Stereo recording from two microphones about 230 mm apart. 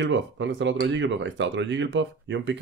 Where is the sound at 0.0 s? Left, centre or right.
Right.